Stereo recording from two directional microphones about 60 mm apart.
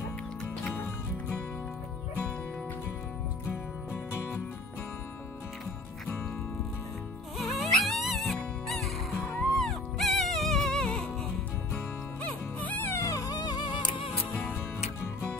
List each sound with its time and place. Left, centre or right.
7.3 s music: centre
12.3 s music: left
12.9 s music: left